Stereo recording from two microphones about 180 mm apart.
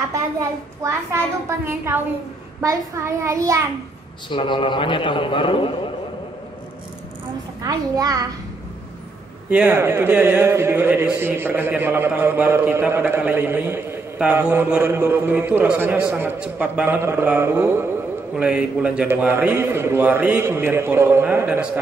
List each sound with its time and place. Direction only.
0.1 s a man's voice: 15° right (ahead or behind)
4.3 s a man's voice: 30° left (ahead or behind)
7.6 s a child's voice: 20° right (ahead or behind)
9.5 s a man's voice: 10° right (ahead or behind)